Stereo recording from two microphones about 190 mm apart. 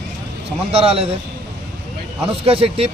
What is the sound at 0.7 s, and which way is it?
Speech, 30° right (ahead or behind).